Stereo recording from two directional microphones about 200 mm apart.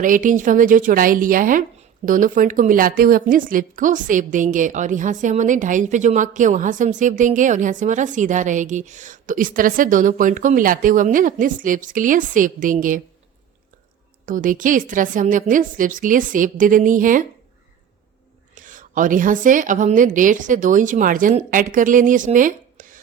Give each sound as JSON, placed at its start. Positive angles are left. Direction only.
{"t": 0.0, "sound": "a woman's voice", "side_deg": -40}
{"t": 14.3, "sound": "a woman's voice", "side_deg": -40}
{"t": 18.5, "sound": "a woman's voice", "side_deg": -40}